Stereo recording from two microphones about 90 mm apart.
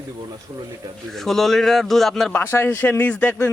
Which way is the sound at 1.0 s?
5° left (ahead or behind).